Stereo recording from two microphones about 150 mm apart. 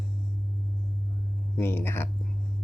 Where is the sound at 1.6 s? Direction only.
15° left (ahead or behind).